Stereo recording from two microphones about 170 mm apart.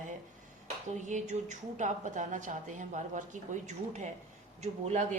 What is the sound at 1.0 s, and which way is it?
A woman's voice, 45° right (ahead or behind).